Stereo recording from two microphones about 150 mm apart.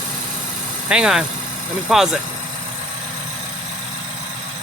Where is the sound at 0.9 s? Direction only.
5° right (ahead or behind).